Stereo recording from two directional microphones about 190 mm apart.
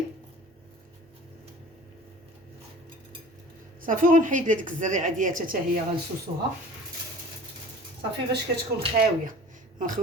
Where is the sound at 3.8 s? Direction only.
45° right (ahead or behind).